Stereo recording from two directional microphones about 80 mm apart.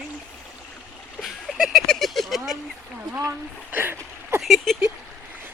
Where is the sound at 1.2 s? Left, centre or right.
Centre.